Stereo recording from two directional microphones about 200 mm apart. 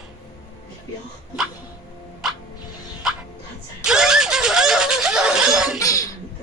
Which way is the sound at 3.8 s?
5° right (ahead or behind).